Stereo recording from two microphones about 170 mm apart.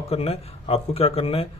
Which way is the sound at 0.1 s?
35° left (ahead or behind).